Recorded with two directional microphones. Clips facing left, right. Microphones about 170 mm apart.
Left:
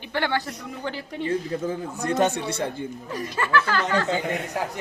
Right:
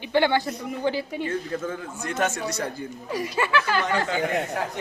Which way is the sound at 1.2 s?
30° left (ahead or behind).